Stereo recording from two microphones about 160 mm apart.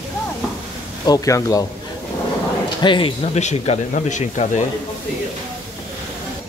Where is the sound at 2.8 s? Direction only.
30° left (ahead or behind); by 4.6 s 50° left (ahead or behind).